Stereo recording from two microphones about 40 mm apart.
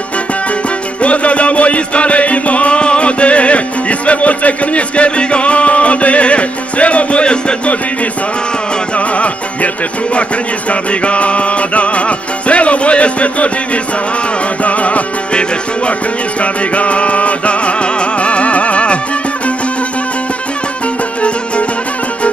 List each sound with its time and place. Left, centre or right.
1.0 s music: left
8.9 s music: left
10.7 s music: left
14.6 s music: left